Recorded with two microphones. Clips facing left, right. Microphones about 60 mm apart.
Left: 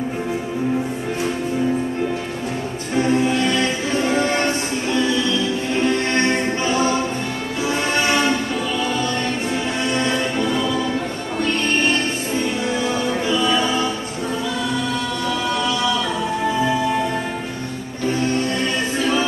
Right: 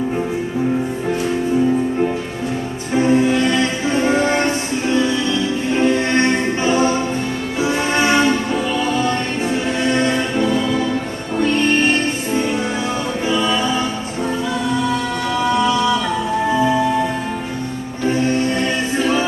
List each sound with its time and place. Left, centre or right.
3.0 s music: right
5.8 s music: right
18.9 s music: right